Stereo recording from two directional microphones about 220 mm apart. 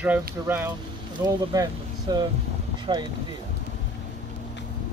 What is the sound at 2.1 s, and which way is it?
Speech, 20° right (ahead or behind).